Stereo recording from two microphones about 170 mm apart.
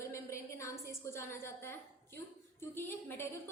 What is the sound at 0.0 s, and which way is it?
A woman's voice, 15° left (ahead or behind).